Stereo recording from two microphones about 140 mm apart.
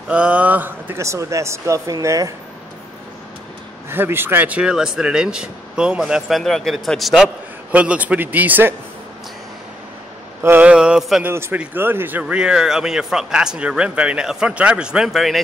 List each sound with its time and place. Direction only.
0.1 s a man's voice: 10° right (ahead or behind)
3.9 s speech: 15° right (ahead or behind)
10.4 s speech: 10° right (ahead or behind)
11.2 s speech: 15° right (ahead or behind); by 15.4 s centre (ahead or behind)